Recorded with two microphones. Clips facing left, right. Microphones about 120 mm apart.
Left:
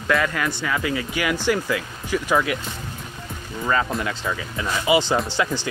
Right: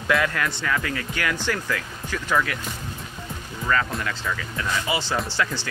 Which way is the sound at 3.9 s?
20° left (ahead or behind).